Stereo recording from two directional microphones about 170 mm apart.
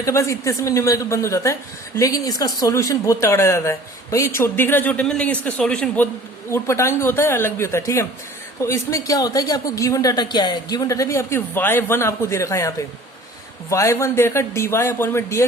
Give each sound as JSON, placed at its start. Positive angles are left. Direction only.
{"t": 0.0, "sound": "a woman's voice", "side_deg": 15}